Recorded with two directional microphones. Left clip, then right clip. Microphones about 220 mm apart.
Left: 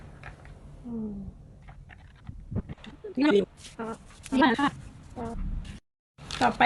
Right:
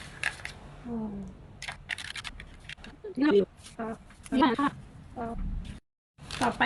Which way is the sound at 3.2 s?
50° left (ahead or behind).